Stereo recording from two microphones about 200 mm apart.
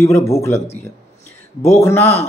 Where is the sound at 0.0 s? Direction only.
15° left (ahead or behind).